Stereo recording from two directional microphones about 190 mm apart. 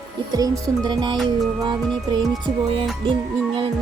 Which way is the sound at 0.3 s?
20° right (ahead or behind).